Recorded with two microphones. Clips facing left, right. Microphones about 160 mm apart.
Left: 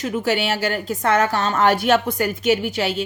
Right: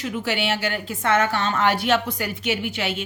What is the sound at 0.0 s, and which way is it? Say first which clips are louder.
A woman's voice: left 4 dB; 45° left (ahead or behind).